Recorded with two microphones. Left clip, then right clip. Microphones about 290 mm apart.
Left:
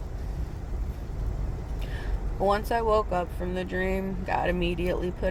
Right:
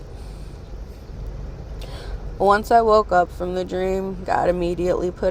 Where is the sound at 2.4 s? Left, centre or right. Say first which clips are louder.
Right 10 dB; centre.